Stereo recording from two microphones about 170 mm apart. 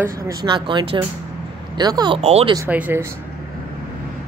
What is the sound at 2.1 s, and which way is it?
Speech, 35° right (ahead or behind).